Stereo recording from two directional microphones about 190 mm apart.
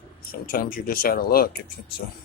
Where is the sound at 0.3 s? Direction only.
50° left (ahead or behind).